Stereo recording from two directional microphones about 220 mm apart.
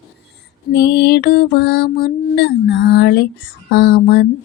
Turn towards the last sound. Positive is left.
turn(degrees=50)  # may be behind; listen again after turning